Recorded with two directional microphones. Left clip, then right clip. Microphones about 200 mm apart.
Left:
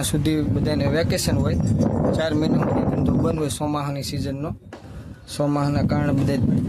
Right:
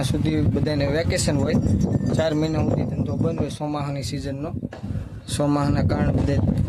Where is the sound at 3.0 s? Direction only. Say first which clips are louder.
Left 3 dB; 20° left (ahead or behind).